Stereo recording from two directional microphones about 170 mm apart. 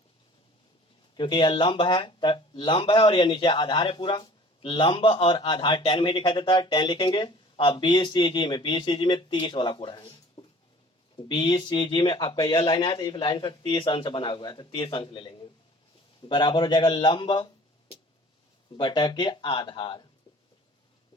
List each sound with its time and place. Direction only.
1.1 s speech: 30° left (ahead or behind)
18.8 s speech: 25° left (ahead or behind)